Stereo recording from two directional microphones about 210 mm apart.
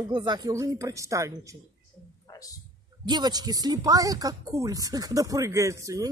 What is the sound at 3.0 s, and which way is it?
Speech, 20° right (ahead or behind).